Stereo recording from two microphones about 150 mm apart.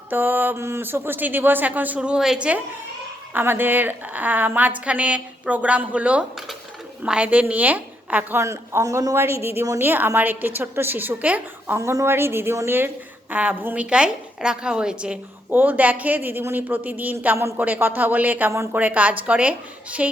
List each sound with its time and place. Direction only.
0.1 s a woman's voice: 10° right (ahead or behind)